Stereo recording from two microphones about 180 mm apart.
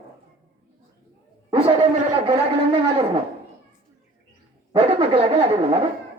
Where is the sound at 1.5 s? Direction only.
30° right (ahead or behind).